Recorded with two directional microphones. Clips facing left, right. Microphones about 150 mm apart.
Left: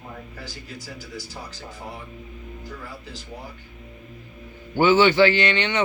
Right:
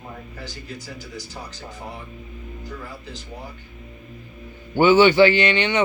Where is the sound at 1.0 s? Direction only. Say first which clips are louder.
Right 1 dB; 10° left (ahead or behind).